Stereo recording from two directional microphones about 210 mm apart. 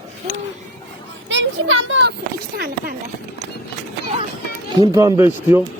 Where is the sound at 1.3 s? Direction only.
60° right (ahead or behind).